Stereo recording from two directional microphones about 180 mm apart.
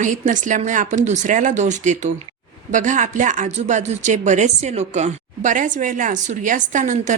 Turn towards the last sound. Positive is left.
turn(degrees=-45)  # may be behind; listen again after turning